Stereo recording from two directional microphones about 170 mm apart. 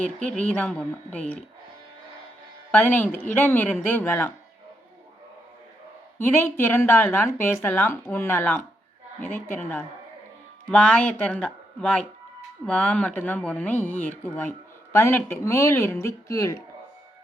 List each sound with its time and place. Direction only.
0.0 s speech: 5° left (ahead or behind)
2.7 s speech: 10° left (ahead or behind)
6.1 s speech: 15° left (ahead or behind)